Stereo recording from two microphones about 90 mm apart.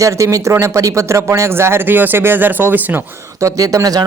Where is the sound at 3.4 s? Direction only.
40° right (ahead or behind).